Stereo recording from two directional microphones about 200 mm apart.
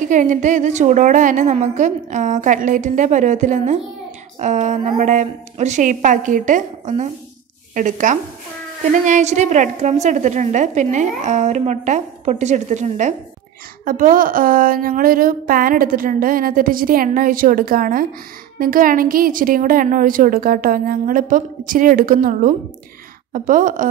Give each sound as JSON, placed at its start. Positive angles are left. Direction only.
{"t": 0.1, "sound": "a woman's voice", "side_deg": -40}